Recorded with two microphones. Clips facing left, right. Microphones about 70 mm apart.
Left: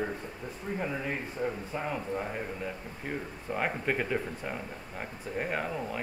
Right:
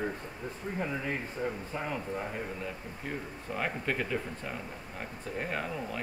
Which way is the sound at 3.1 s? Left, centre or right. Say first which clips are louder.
Left 2 dB; centre.